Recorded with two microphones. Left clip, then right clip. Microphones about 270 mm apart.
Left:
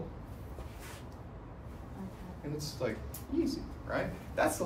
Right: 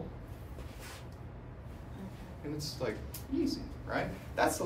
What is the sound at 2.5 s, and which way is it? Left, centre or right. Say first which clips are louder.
A man's voice: left 1 dB; centre.